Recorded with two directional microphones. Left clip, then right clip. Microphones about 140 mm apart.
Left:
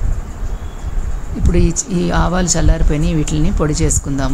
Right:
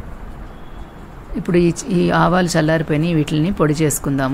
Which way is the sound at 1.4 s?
40° right (ahead or behind).